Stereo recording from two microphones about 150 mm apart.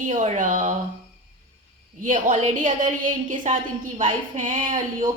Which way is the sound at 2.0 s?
60° right (ahead or behind).